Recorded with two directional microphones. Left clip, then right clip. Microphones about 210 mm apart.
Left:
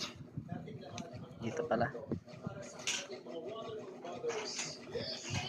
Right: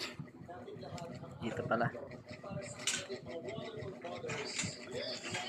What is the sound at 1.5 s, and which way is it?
Speech, 5° left (ahead or behind).